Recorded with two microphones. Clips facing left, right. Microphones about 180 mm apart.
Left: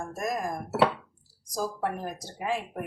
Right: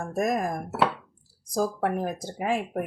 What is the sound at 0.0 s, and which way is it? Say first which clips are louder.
A woman's voice: right 5 dB; 60° right (ahead or behind).